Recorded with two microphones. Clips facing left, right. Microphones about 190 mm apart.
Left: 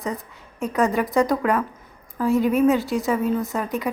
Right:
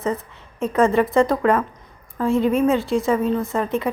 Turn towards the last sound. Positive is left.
turn(degrees=0)  # may be behind; listen again after turning